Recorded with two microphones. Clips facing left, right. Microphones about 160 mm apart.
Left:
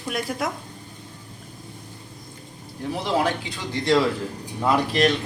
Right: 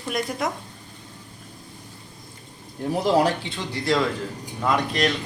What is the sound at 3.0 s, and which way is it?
Speech, 35° right (ahead or behind).